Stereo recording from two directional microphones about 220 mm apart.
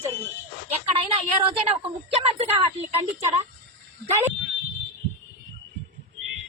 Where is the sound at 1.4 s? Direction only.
25° right (ahead or behind).